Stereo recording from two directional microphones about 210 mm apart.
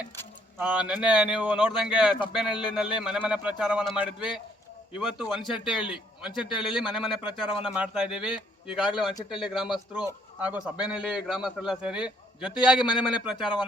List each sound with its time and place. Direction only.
0.6 s a man's voice: 5° right (ahead or behind)
12.8 s a man's voice: 20° left (ahead or behind)
13.1 s a man's voice: 5° right (ahead or behind)
13.4 s a man's voice: 20° left (ahead or behind)